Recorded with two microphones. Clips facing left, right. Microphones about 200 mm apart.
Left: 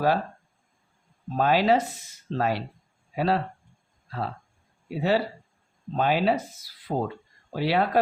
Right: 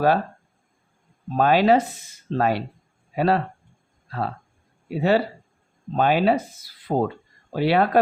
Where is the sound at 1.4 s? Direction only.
55° right (ahead or behind).